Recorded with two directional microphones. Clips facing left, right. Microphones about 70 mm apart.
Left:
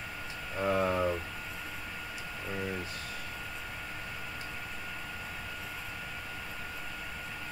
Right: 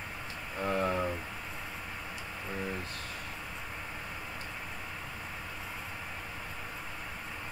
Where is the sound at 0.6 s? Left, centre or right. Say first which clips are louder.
Left 2 dB; centre.